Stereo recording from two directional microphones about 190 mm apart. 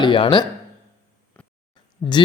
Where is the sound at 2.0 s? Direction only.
10° left (ahead or behind).